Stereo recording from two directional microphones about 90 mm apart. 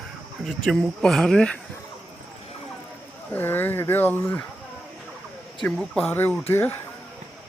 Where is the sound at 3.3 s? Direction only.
25° left (ahead or behind).